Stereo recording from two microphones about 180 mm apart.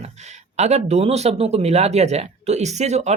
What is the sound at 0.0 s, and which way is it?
Speech, 40° right (ahead or behind).